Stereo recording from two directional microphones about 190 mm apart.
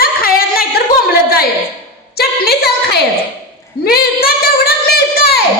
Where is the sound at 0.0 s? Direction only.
50° left (ahead or behind).